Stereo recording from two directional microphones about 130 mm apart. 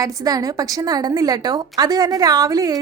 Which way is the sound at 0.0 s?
30° right (ahead or behind).